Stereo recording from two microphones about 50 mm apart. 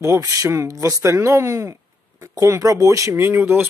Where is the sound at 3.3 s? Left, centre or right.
Right.